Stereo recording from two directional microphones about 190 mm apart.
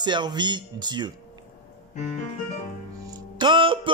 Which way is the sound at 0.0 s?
25° right (ahead or behind).